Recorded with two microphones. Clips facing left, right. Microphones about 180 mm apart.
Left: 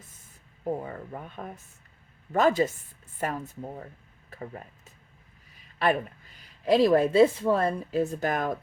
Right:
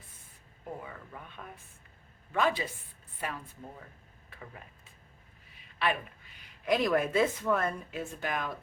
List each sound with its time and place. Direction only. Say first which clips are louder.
0.6 s speech: left 10 dB; 40° left (ahead or behind)
5.8 s speech: left 6 dB; 40° left (ahead or behind)